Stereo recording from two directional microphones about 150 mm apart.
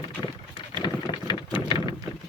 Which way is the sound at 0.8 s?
30° left (ahead or behind).